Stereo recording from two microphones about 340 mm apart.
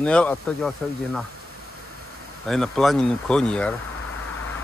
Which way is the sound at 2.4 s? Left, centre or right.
Centre.